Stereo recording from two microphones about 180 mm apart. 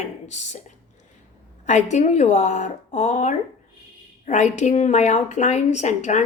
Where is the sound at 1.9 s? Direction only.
40° left (ahead or behind).